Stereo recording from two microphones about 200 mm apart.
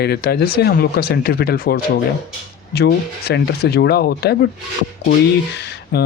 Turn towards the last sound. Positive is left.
turn(degrees=55)  # may be behind; listen again after turning